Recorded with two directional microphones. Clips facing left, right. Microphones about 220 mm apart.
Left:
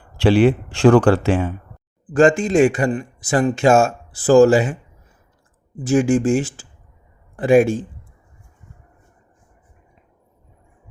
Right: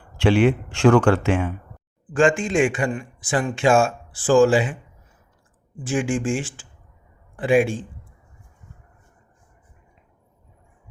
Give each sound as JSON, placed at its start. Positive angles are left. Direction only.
{"t": 0.2, "sound": "a man's voice", "side_deg": 35}